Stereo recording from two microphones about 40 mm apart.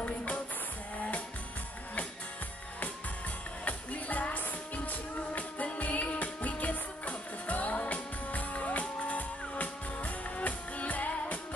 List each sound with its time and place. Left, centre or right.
0.0 s music: left
3.6 s music: left